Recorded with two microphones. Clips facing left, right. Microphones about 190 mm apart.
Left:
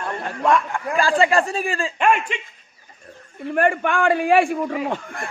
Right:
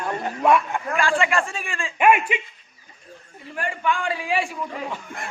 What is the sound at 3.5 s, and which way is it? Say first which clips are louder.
A man's voice: left 6 dB; 55° left (ahead or behind).